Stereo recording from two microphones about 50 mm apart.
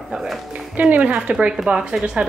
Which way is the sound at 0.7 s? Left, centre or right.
Right.